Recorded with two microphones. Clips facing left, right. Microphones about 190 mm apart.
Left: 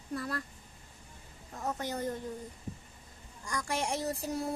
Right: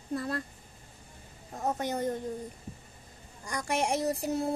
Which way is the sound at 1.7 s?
20° right (ahead or behind).